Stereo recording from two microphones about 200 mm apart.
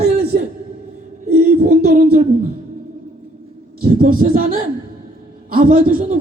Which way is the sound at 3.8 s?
45° right (ahead or behind).